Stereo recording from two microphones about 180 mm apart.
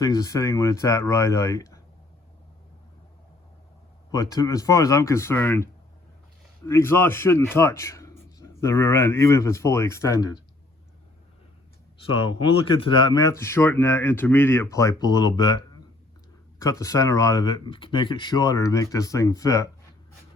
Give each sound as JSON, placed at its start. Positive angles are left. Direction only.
{"t": 0.0, "sound": "speech", "side_deg": 20}
{"t": 4.1, "sound": "speech", "side_deg": 20}
{"t": 6.7, "sound": "speech", "side_deg": 15}
{"t": 12.2, "sound": "speech", "side_deg": 30}